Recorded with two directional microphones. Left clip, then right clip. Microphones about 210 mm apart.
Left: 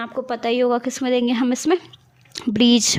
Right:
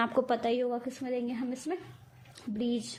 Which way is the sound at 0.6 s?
50° left (ahead or behind).